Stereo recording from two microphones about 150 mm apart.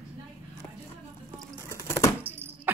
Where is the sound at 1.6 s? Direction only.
20° left (ahead or behind).